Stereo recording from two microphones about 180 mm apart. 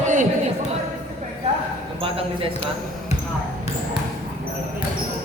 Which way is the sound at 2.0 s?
30° right (ahead or behind).